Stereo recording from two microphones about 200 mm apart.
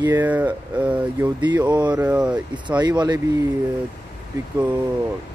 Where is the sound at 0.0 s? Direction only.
15° right (ahead or behind).